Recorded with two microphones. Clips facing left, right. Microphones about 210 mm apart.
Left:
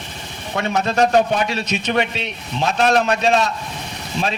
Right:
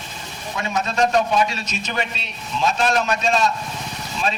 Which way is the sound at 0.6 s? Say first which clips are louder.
Left 3 dB; 60° left (ahead or behind).